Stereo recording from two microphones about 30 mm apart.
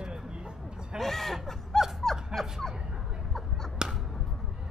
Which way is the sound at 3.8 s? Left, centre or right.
Right.